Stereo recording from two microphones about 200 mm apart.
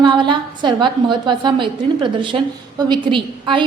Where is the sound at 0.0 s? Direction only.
25° right (ahead or behind).